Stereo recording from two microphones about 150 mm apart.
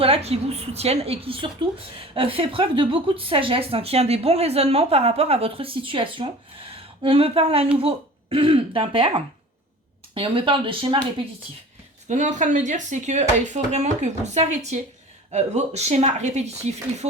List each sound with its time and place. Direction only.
0.0 s a woman's voice: 45° right (ahead or behind)
12.0 s speech: 55° right (ahead or behind)